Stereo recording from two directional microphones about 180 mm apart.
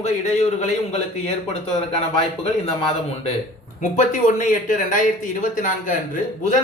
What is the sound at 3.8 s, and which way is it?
A man's voice, 45° left (ahead or behind).